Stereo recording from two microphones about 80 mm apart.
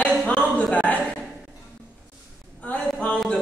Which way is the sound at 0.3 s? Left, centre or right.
Centre.